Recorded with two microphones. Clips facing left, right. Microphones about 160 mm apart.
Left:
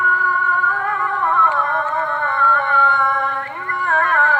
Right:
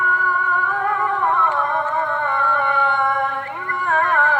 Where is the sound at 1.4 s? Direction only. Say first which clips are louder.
Left 1 dB; 15° right (ahead or behind).